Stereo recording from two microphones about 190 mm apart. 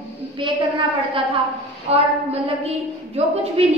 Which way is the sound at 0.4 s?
25° right (ahead or behind).